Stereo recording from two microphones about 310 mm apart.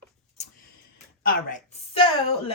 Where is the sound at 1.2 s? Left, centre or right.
Left.